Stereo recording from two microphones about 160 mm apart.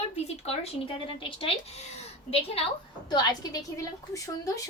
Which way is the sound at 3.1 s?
25° left (ahead or behind).